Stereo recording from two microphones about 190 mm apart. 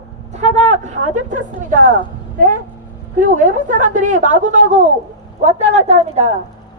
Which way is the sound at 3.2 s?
45° right (ahead or behind).